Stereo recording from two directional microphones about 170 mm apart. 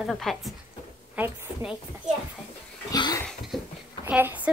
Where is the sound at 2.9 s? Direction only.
20° left (ahead or behind).